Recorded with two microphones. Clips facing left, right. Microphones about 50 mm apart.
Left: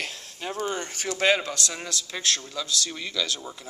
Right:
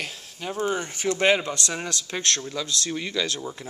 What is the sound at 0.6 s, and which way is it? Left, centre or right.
Speech, centre.